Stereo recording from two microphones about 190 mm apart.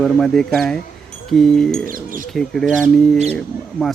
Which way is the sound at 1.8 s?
45° right (ahead or behind).